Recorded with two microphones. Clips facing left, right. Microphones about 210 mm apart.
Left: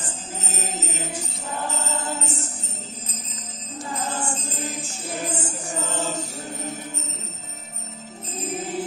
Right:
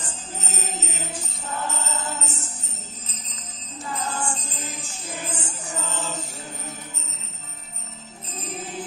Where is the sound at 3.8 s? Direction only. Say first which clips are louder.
Even; 25° left (ahead or behind).